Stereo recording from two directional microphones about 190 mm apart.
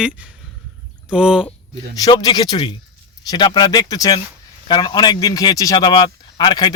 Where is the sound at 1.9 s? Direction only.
20° left (ahead or behind).